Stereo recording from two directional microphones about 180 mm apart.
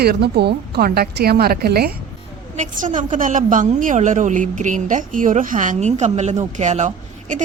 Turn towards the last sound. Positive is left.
turn(degrees=-45)  # may be behind; listen again after turning